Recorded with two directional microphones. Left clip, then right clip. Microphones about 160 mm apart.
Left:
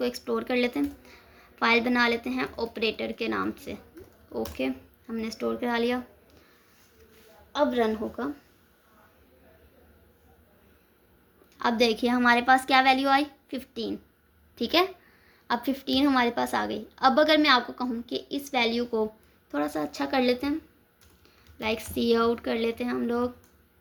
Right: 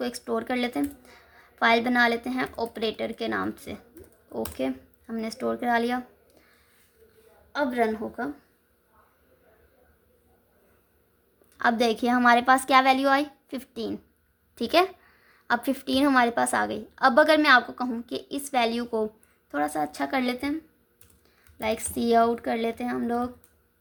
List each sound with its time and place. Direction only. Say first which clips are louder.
0.0 s a woman's voice: left 1 dB; 35° right (ahead or behind)
7.5 s a woman's voice: left 1 dB; 25° right (ahead or behind)
11.5 s a woman's voice: right 1 dB; 40° right (ahead or behind)
21.6 s a woman's voice: right 1 dB; 35° right (ahead or behind)